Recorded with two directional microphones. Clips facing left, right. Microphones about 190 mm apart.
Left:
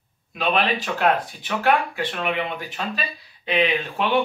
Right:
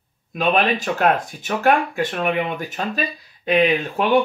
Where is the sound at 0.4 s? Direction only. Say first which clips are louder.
Right 3 dB; 45° right (ahead or behind).